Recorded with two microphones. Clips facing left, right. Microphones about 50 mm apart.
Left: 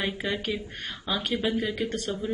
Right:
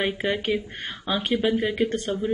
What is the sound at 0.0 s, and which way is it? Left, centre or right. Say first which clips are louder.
Speech: right 4 dB; right.